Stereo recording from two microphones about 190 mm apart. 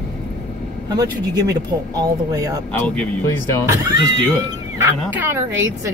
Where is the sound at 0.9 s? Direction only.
20° right (ahead or behind).